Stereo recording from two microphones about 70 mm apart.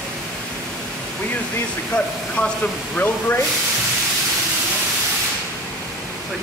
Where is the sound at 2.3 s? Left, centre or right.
Centre.